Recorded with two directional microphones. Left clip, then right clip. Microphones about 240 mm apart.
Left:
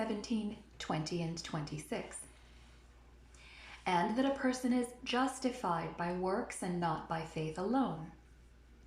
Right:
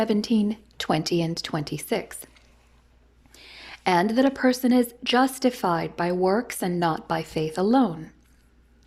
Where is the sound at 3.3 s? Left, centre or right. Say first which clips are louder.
Right 11 dB; right.